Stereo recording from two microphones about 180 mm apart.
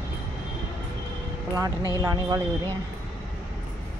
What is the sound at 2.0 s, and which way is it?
Speech, 20° right (ahead or behind).